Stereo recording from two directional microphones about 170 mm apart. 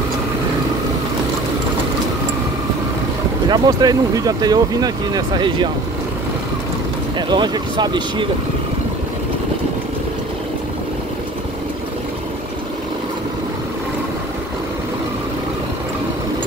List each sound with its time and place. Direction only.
3.4 s speech: 25° right (ahead or behind)
7.2 s speech: 25° right (ahead or behind)